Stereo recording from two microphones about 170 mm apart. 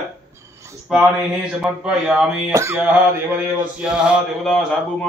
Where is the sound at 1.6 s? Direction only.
5° right (ahead or behind).